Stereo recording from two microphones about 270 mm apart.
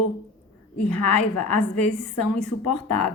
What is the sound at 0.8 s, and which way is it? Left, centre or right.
Speech, left.